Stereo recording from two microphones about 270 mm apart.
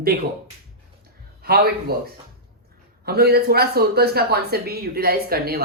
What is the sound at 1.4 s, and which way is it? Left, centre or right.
Speech, right.